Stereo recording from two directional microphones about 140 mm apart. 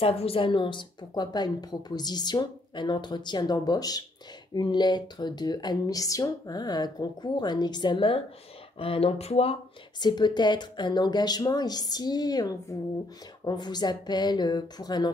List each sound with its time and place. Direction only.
0.0 s a woman's voice: 45° left (ahead or behind)
9.9 s a woman's voice: 30° left (ahead or behind)